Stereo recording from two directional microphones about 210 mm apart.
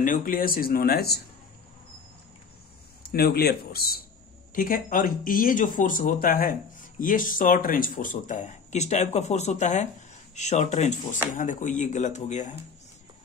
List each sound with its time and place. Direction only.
0.0 s speech: 40° left (ahead or behind)
3.0 s speech: 45° left (ahead or behind)